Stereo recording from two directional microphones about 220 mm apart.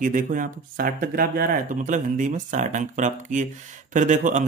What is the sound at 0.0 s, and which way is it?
Speech, 35° right (ahead or behind).